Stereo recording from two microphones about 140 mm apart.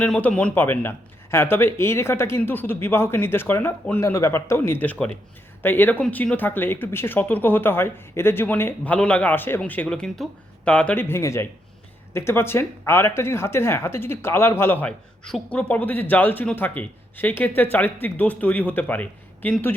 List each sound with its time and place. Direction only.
0.0 s speech: 10° left (ahead or behind)